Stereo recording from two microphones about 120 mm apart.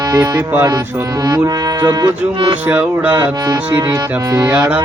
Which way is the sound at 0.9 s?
25° right (ahead or behind).